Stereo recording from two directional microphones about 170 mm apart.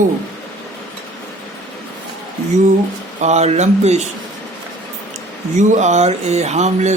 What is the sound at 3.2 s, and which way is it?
Speech, 40° right (ahead or behind).